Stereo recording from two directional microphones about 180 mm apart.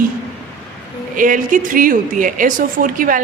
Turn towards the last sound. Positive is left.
turn(degrees=-50)  # may be behind; listen again after turning